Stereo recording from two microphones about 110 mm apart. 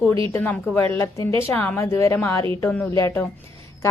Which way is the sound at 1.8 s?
25° left (ahead or behind).